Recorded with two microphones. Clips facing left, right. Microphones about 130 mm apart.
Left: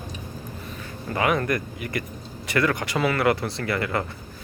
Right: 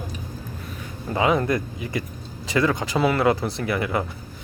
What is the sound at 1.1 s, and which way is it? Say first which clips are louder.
Speech: right 2 dB; 20° right (ahead or behind).